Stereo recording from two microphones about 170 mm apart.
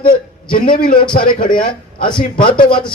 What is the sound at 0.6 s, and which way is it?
A man's voice, 55° left (ahead or behind).